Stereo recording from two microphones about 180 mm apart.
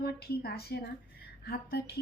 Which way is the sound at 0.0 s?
60° left (ahead or behind).